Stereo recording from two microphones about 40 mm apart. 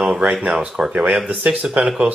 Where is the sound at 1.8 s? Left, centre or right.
Right.